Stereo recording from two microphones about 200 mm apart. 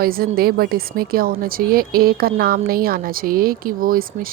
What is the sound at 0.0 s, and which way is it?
A woman's voice, 50° right (ahead or behind).